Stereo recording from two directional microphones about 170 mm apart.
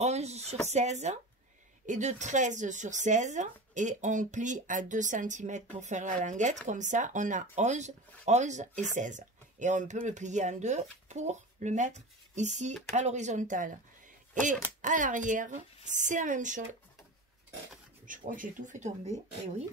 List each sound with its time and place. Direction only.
0.0 s speech: 40° right (ahead or behind)
14.8 s speech: 50° right (ahead or behind)
18.0 s speech: 50° right (ahead or behind)